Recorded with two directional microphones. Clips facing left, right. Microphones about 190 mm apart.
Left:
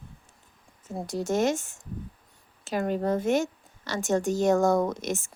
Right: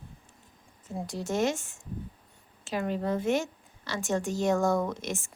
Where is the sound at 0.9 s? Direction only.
40° left (ahead or behind).